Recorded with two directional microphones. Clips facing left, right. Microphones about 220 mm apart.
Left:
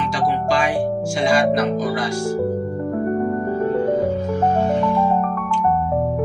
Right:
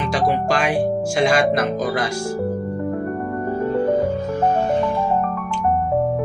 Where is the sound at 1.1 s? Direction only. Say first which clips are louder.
Even; 65° right (ahead or behind).